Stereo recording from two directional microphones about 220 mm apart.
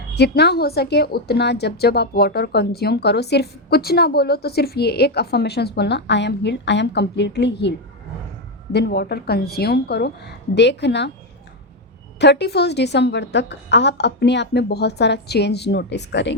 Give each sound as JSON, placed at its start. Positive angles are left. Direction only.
{"t": 0.1, "sound": "a woman's voice", "side_deg": 50}
{"t": 8.7, "sound": "a woman's voice", "side_deg": 50}
{"t": 12.2, "sound": "a woman's voice", "side_deg": 50}